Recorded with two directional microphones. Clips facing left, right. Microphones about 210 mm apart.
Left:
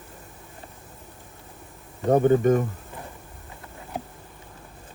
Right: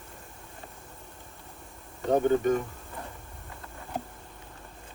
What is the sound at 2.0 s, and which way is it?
Speech, 50° left (ahead or behind).